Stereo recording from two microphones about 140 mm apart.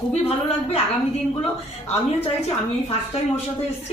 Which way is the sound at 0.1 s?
45° left (ahead or behind).